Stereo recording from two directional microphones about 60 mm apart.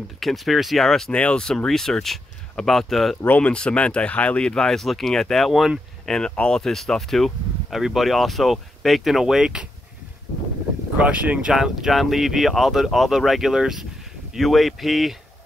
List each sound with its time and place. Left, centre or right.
0.2 s speech: centre
1.1 s speech: centre
3.2 s speech: left
3.4 s speech: centre
4.5 s speech: centre
6.6 s speech: centre
11.0 s speech: right
11.5 s speech: centre